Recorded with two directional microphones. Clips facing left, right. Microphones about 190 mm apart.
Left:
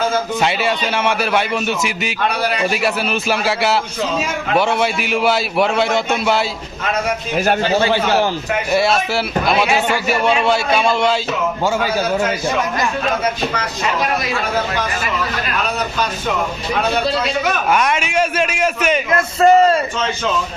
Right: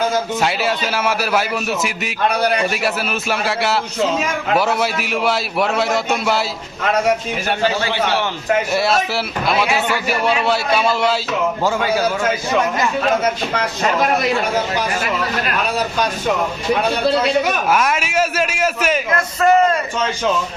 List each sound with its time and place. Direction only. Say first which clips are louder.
0.4 s a man's voice: left 1 dB; centre (ahead or behind)
4.8 s a man's voice: left 2 dB; centre (ahead or behind)
7.9 s a man's voice: left 3 dB; 45° left (ahead or behind)
8.7 s a man's voice: left 2 dB; centre (ahead or behind)
13.8 s a man's voice: right 3 dB; 45° right (ahead or behind)
17.5 s a man's voice: even; 5° right (ahead or behind)
19.1 s speech: left 3 dB; 30° left (ahead or behind)